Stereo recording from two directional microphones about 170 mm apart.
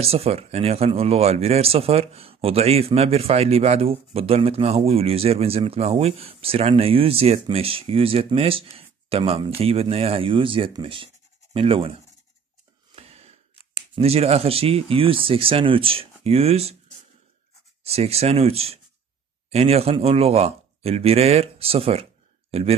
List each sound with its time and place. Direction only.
0.0 s speech: 35° right (ahead or behind)
12.9 s gasp: 35° right (ahead or behind)
13.9 s speech: 35° right (ahead or behind)
17.8 s speech: 35° right (ahead or behind)